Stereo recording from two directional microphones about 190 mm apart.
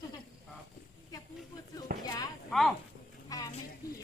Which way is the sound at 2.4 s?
Centre (ahead or behind).